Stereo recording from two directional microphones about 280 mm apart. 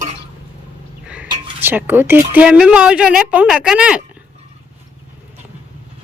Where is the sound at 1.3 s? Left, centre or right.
Centre.